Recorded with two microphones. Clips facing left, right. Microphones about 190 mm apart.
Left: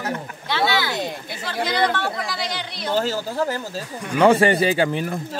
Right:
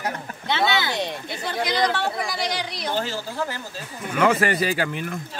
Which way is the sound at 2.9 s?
45° left (ahead or behind).